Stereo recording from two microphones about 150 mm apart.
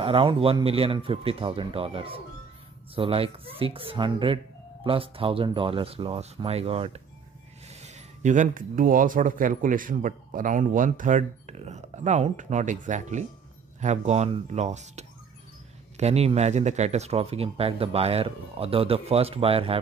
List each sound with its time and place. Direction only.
0.0 s speech: 35° right (ahead or behind)